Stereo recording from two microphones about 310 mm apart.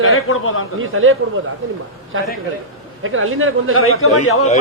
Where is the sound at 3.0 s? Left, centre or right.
Right.